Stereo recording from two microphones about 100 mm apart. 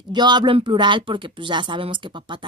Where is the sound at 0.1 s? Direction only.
45° right (ahead or behind).